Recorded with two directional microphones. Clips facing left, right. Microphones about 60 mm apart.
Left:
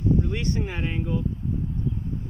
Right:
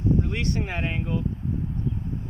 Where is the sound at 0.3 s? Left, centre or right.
Right.